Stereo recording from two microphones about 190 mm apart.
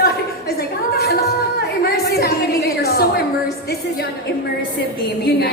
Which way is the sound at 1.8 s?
55° left (ahead or behind).